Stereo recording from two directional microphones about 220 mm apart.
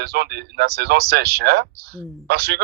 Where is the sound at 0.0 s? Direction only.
45° right (ahead or behind).